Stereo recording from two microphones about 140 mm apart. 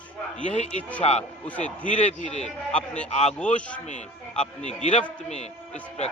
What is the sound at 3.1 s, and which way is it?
Speech, 50° left (ahead or behind).